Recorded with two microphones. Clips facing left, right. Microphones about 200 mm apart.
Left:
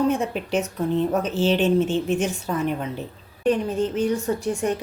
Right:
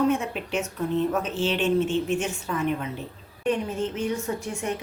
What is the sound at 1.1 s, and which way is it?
A woman's voice, 35° left (ahead or behind).